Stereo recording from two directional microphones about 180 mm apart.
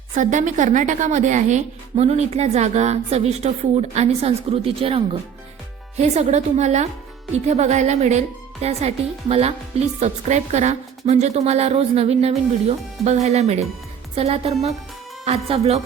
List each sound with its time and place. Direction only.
0.2 s a woman's voice: 45° right (ahead or behind)